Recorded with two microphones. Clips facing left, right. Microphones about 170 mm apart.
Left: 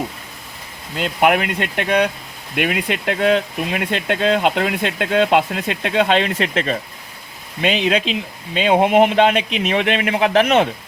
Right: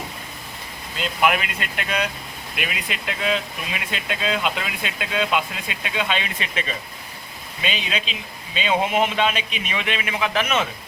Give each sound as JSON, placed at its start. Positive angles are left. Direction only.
{"t": 0.9, "sound": "speech", "side_deg": 60}